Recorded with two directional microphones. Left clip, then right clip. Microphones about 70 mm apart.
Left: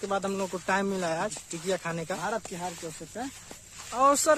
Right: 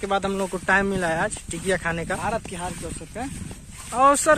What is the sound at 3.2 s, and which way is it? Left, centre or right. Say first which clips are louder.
Speech: right 5 dB; left.